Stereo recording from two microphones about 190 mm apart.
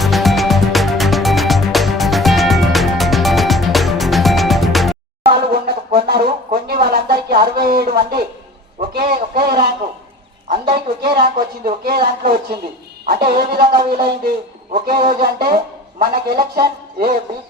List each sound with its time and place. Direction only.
0.0 s music: centre (ahead or behind)
5.3 s a sound: 55° right (ahead or behind)
8.9 s a man's voice: 50° right (ahead or behind)